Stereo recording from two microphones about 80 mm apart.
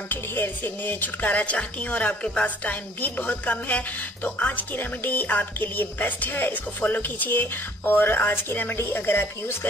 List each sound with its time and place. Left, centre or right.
0.1 s speech: left